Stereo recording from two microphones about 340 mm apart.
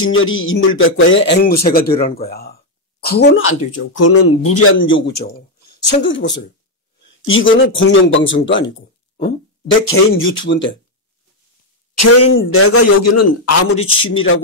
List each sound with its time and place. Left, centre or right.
0.0 s speech: left
11.9 s a man's voice: left
13.7 s speech: centre
14.1 s speech: left